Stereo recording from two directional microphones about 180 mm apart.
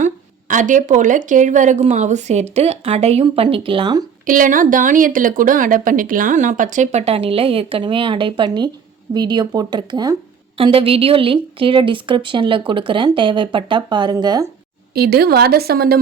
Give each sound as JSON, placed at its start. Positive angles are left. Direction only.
{"t": 0.0, "sound": "speech", "side_deg": -45}
{"t": 4.3, "sound": "a woman's voice", "side_deg": -50}
{"t": 14.9, "sound": "a woman's voice", "side_deg": -60}